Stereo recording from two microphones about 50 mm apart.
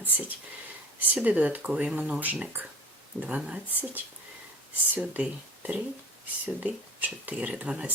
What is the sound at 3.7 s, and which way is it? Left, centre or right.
A woman's voice, right.